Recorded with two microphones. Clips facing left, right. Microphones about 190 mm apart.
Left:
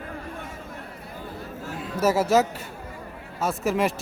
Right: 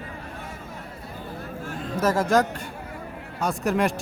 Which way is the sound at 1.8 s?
10° left (ahead or behind).